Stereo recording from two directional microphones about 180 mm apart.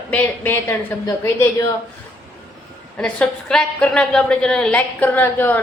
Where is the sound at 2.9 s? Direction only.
5° left (ahead or behind).